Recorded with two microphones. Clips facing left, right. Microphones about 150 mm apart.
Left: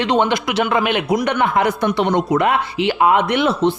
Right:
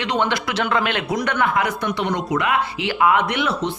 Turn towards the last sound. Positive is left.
turn(degrees=30)  # may be behind; listen again after turning